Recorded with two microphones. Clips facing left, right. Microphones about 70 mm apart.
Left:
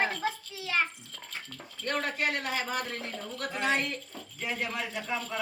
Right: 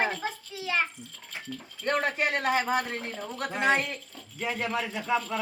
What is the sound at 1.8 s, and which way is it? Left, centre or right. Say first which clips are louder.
A man's voice: right 4 dB; right.